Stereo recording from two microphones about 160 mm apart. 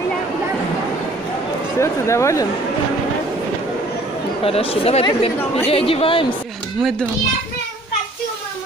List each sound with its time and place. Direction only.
1.8 s speech: 20° left (ahead or behind)
4.5 s speech: 35° left (ahead or behind)
6.8 s a child's voice: centre (ahead or behind)